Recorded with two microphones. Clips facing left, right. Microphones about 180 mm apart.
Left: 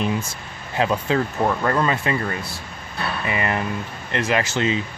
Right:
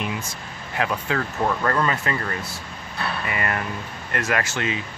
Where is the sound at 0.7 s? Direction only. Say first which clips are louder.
Left 4 dB; 25° left (ahead or behind).